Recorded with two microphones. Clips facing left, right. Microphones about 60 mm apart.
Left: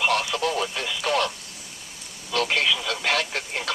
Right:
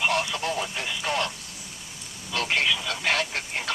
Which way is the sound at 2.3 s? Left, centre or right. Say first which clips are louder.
Left 2 dB; left.